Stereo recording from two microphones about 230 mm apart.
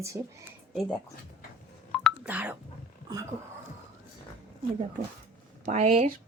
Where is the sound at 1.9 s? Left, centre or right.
Centre.